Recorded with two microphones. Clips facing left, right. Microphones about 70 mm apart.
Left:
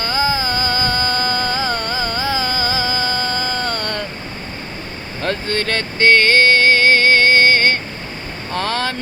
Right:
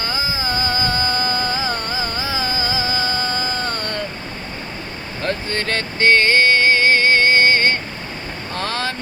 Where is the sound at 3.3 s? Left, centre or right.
Left.